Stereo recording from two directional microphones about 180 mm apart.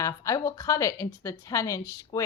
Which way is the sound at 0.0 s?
15° left (ahead or behind).